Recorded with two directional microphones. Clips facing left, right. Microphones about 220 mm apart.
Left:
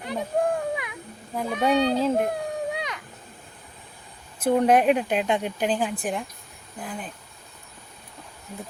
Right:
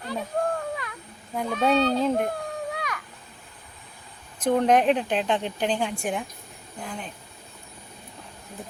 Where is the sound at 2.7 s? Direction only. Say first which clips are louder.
Left 1 dB; 20° left (ahead or behind).